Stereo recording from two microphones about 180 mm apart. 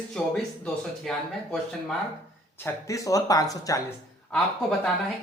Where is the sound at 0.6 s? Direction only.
5° left (ahead or behind).